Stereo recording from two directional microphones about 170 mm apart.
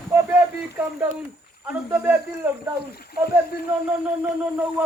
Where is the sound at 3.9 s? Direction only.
10° right (ahead or behind).